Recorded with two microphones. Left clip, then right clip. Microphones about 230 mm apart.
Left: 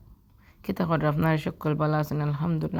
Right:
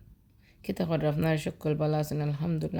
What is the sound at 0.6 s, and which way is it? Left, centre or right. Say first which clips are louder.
Speech: left 3 dB; centre.